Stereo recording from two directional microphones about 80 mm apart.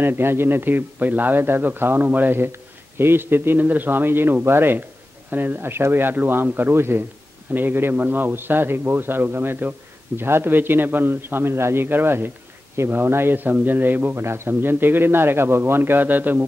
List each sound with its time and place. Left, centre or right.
0.0 s a man's voice: right